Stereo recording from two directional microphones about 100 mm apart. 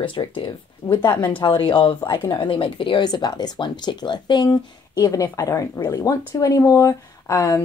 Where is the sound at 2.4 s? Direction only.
65° left (ahead or behind).